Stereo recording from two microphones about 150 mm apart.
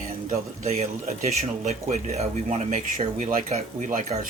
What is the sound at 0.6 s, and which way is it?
Speech, 50° right (ahead or behind).